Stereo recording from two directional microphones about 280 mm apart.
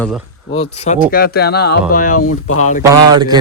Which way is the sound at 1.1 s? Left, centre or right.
Left.